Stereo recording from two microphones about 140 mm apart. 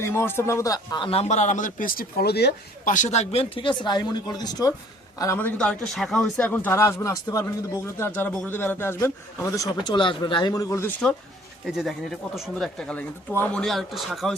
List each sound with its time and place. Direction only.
0.0 s speech: 15° left (ahead or behind)
1.0 s a man's voice: 45° left (ahead or behind); by 2.2 s 80° left
2.8 s a man's voice: 60° left (ahead or behind); by 5.4 s 25° left (ahead or behind)
5.4 s speech: 10° left (ahead or behind)
11.6 s speech: centre (ahead or behind)